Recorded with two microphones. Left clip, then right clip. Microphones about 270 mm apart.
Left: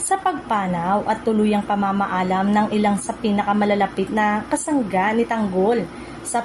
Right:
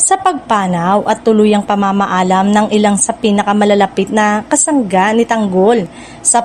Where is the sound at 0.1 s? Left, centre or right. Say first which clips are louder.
Right 7 dB; right.